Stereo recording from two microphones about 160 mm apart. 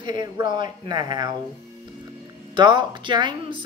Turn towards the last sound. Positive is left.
turn(degrees=-30)  # may be behind; listen again after turning